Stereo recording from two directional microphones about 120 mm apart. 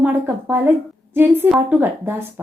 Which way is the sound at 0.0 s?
15° right (ahead or behind).